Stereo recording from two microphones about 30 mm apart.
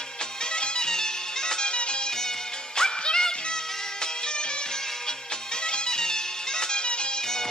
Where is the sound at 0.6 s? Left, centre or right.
Left.